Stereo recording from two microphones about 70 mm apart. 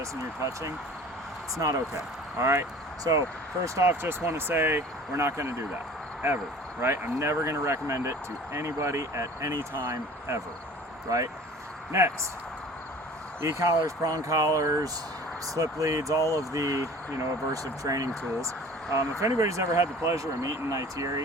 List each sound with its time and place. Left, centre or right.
0.0 s speech: right
2.4 s speech: right
6.8 s speech: right
11.1 s speech: right
11.9 s speech: right
13.4 s speech: right